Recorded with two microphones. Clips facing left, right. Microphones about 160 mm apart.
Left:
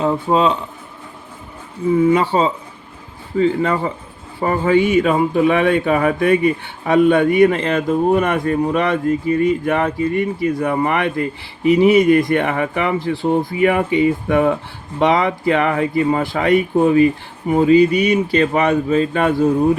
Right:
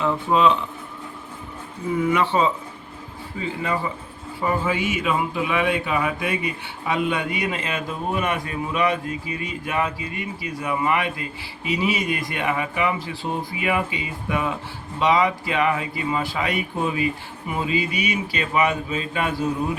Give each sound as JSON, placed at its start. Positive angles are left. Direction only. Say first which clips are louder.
{"t": 0.0, "sound": "speech", "louder": "left 3 dB", "side_deg": 30}
{"t": 2.0, "sound": "speech", "louder": "left 5 dB", "side_deg": 35}
{"t": 3.3, "sound": "a man's voice", "louder": "left 10 dB", "side_deg": 50}